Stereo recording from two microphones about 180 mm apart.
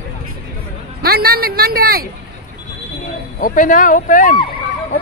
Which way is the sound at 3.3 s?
50° left (ahead or behind).